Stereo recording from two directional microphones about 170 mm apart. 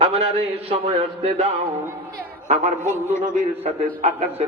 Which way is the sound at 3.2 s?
45° right (ahead or behind).